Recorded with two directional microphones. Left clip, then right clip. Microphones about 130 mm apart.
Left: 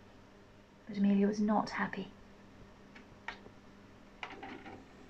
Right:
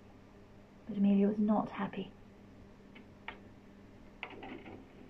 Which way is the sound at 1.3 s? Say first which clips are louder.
Left 1 dB; 25° left (ahead or behind).